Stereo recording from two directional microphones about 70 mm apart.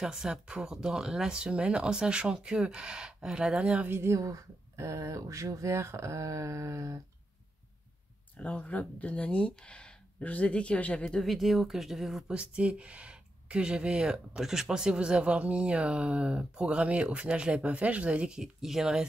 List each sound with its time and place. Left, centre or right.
0.0 s speech: centre
3.8 s speech: right
8.4 s speech: centre
11.2 s speech: centre
12.3 s speech: centre